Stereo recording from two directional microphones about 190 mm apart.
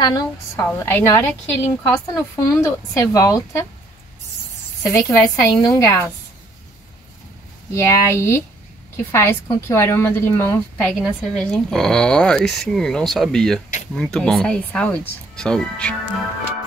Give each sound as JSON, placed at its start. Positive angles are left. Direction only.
{"t": 0.0, "sound": "a woman's voice", "side_deg": 20}
{"t": 4.8, "sound": "a woman's voice", "side_deg": 15}
{"t": 7.7, "sound": "a woman's voice", "side_deg": 15}